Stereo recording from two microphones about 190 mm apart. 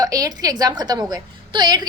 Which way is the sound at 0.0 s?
20° right (ahead or behind).